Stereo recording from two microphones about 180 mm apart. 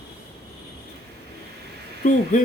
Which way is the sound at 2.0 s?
45° left (ahead or behind).